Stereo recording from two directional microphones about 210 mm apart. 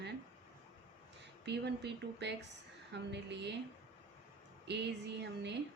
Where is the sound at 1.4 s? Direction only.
55° right (ahead or behind).